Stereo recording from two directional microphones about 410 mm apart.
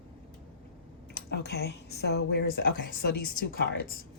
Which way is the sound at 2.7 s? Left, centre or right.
Left.